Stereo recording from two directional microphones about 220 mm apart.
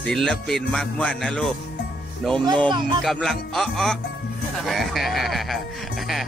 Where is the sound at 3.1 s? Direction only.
Centre (ahead or behind).